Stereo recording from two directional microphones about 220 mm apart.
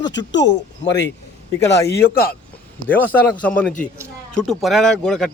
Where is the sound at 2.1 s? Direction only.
45° left (ahead or behind).